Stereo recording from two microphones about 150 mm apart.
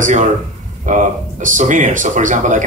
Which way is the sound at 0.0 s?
60° right (ahead or behind).